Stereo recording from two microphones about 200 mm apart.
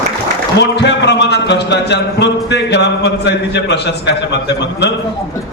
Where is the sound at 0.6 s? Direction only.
60° left (ahead or behind).